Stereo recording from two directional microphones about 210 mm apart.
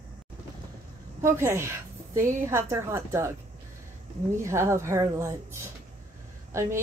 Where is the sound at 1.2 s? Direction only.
10° right (ahead or behind).